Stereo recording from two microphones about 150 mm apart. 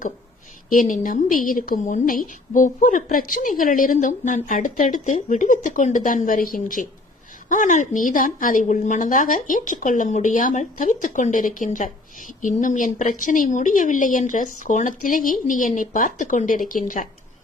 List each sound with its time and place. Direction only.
0.7 s a woman's voice: 60° left (ahead or behind)